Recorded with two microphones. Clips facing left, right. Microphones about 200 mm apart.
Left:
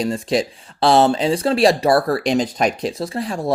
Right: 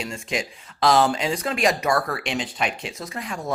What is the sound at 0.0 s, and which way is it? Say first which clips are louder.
Speech: left 9 dB; 35° left (ahead or behind).